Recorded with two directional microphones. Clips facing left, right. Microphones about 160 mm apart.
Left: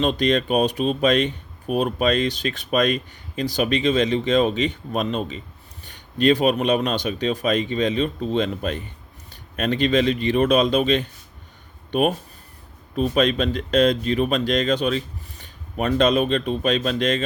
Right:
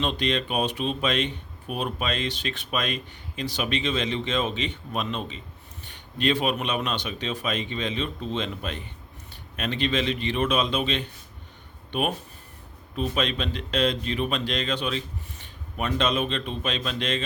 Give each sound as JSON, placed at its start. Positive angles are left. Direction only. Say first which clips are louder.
{"t": 0.0, "sound": "speech", "louder": "left 6 dB", "side_deg": 45}